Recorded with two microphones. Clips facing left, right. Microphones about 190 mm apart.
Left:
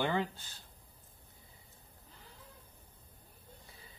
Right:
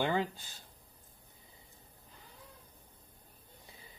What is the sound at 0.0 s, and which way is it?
Speech, 15° right (ahead or behind).